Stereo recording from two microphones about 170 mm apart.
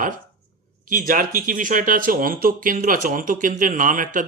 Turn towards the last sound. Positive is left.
turn(degrees=-50)  # may be behind; listen again after turning